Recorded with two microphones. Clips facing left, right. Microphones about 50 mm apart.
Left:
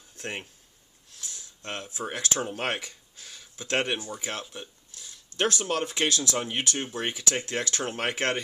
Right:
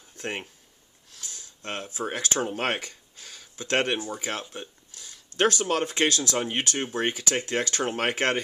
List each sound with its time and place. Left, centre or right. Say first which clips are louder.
0.2 s speech: right 3 dB; right
1.2 s a sound: even; right
1.6 s speech: right 3 dB; right
2.8 s a sound: right 2 dB; right
4.4 s speech: right 2 dB; right
5.4 s speech: right 3 dB; right
6.4 s speech: right 2 dB; right